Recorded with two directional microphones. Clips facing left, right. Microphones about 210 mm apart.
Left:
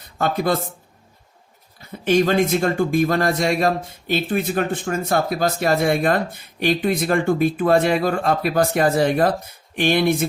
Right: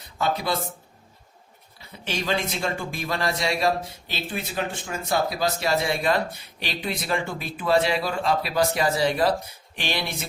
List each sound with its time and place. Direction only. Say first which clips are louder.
0.2 s speech: left 5 dB; 50° left (ahead or behind)
2.0 s speech: left 11 dB; 50° left (ahead or behind)